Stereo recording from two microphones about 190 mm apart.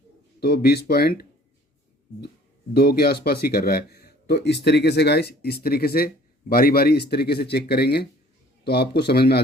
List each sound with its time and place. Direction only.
0.3 s speech: 55° left (ahead or behind)
2.7 s speech: 55° left (ahead or behind)